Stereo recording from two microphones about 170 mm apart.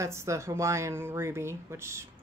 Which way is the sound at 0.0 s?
15° right (ahead or behind).